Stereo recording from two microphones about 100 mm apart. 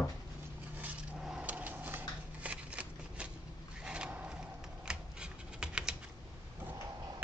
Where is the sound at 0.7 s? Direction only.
15° right (ahead or behind).